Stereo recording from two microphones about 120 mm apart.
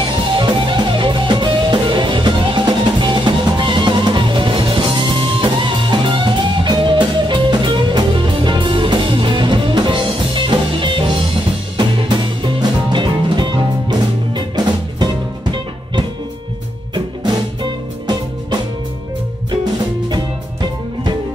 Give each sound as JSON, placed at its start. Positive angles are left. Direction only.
{"t": 0.0, "sound": "music", "side_deg": -40}
{"t": 16.9, "sound": "music", "side_deg": -40}